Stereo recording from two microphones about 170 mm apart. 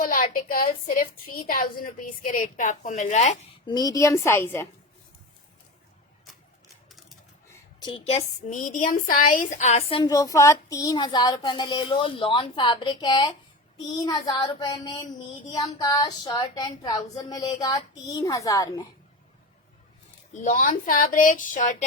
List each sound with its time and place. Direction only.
0.0 s a woman's voice: 55° left (ahead or behind)
3.7 s a woman's voice: 25° left (ahead or behind)
6.8 s typewriter: centre (ahead or behind)
7.9 s child singing: 30° left (ahead or behind)
8.4 s a woman's voice: 50° left (ahead or behind); by 10.1 s 35° left (ahead or behind)
10.1 s child singing: 20° left (ahead or behind)
20.3 s a woman's voice: 45° left (ahead or behind)